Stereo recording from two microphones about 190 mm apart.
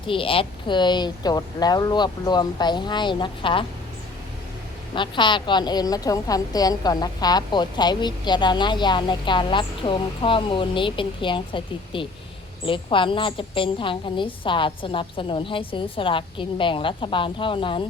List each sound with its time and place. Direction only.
0.1 s a woman's voice: 30° left (ahead or behind)
4.9 s a woman's voice: 25° left (ahead or behind)